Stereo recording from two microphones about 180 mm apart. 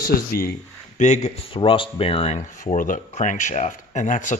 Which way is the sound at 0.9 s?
40° left (ahead or behind).